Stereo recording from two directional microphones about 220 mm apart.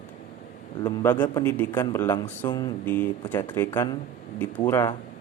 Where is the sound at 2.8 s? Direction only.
5° left (ahead or behind).